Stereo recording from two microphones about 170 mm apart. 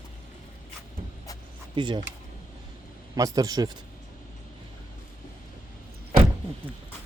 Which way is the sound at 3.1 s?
20° right (ahead or behind).